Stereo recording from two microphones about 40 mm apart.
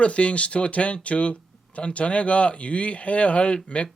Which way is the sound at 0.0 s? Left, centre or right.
Left.